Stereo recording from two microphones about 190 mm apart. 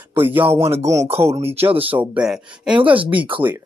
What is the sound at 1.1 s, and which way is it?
Speech, 15° right (ahead or behind).